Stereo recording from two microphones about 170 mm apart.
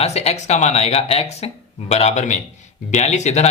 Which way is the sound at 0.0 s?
40° left (ahead or behind).